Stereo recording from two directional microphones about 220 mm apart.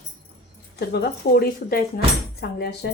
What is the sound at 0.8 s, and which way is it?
Speech, 45° left (ahead or behind).